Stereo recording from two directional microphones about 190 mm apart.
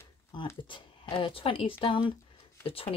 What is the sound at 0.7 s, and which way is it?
Speech, 25° left (ahead or behind).